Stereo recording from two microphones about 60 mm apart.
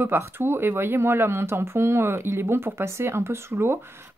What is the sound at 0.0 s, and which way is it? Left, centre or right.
Speech, right.